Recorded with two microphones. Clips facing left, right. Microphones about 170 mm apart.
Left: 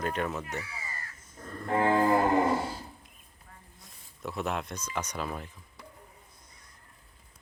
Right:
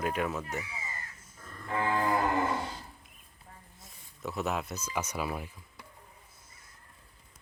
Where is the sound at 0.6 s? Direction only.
20° right (ahead or behind).